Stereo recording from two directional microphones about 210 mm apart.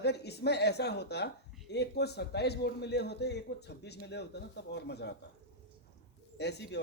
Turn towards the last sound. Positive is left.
turn(degrees=55)  # may be behind; listen again after turning